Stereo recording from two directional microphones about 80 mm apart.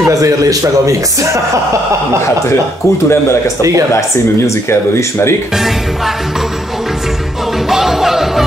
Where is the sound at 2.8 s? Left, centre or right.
Left.